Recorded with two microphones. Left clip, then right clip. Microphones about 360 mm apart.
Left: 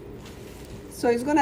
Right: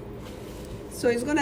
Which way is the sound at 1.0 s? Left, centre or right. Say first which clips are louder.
Left 2 dB; centre.